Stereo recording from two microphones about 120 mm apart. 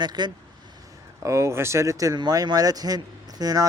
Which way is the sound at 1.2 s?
25° right (ahead or behind).